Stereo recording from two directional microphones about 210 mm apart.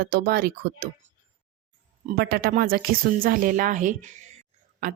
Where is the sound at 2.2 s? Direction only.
45° right (ahead or behind).